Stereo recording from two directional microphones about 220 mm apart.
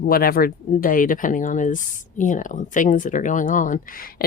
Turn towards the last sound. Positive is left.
turn(degrees=35)  # may be behind; listen again after turning